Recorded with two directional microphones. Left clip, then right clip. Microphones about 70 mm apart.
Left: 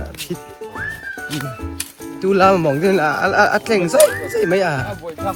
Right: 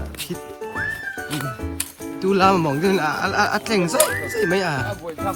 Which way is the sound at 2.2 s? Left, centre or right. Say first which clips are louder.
Left 4 dB; right.